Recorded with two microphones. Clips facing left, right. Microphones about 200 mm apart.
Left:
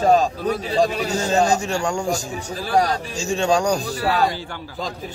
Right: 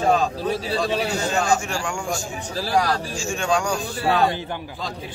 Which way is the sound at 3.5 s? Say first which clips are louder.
Left 3 dB; 40° left (ahead or behind).